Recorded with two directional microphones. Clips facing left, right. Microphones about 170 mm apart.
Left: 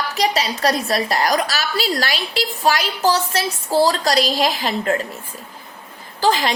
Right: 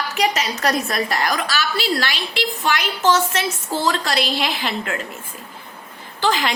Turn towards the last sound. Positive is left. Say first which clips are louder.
# left 2 dB
turn(degrees=35)  # may be behind; listen again after turning